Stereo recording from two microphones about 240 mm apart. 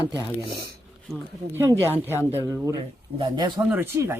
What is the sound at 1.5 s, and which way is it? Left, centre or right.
Speech, centre.